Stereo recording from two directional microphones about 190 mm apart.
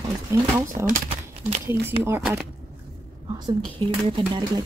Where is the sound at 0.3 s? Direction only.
15° right (ahead or behind).